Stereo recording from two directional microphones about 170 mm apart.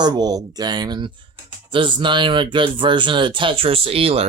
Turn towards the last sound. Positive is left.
turn(degrees=-35)  # may be behind; listen again after turning